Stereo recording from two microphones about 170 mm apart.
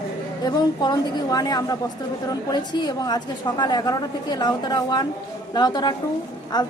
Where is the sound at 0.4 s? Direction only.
25° left (ahead or behind).